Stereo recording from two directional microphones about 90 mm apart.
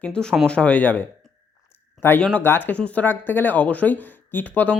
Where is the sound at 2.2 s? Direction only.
15° left (ahead or behind).